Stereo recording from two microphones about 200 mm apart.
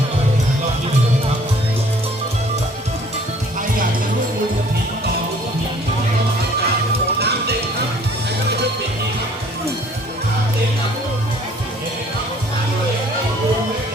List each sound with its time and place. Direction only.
7.2 s music: 55° right (ahead or behind)